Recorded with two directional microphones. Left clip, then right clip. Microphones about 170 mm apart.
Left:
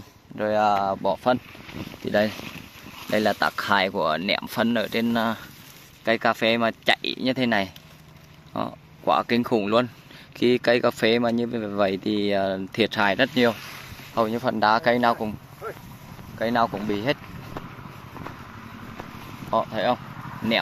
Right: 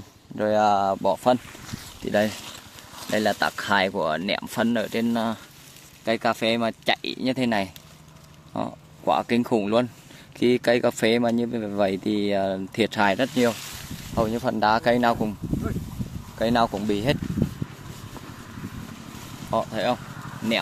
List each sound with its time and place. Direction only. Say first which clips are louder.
0.4 s speech: right 1 dB; 40° right (ahead or behind)
2.0 s speech: even; 15° right (ahead or behind)
3.1 s speech: left 1 dB; centre (ahead or behind)
14.1 s speech: left 1 dB; 20° right (ahead or behind)
16.3 s speech: right 1 dB; 40° right (ahead or behind)
19.5 s speech: left 1 dB; 15° right (ahead or behind)
20.2 s vehicle: left 1 dB; 55° right (ahead or behind)